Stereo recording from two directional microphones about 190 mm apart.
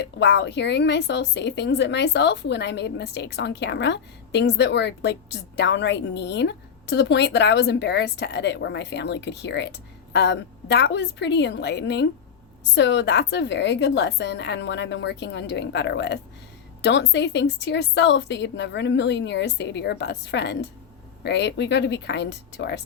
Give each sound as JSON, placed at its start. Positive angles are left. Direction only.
{"t": 0.0, "sound": "a woman's voice", "side_deg": 65}